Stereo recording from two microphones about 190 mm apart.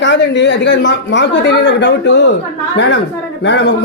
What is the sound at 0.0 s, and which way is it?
Speech, 70° left (ahead or behind).